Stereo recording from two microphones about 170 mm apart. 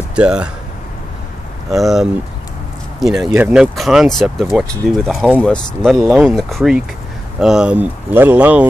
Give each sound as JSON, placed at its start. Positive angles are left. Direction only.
{"t": 0.1, "sound": "speech", "side_deg": -5}
{"t": 1.7, "sound": "speech", "side_deg": 0}